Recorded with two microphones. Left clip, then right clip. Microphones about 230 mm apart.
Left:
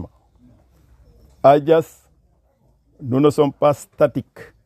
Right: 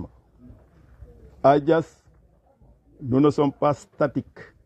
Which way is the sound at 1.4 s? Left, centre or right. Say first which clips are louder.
Left 5 dB; left.